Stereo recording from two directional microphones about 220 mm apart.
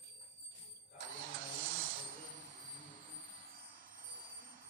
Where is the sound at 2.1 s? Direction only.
35° right (ahead or behind).